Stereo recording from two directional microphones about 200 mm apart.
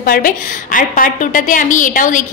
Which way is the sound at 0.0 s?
45° left (ahead or behind).